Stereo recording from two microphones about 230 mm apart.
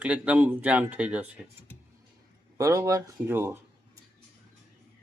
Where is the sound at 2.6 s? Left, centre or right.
Centre.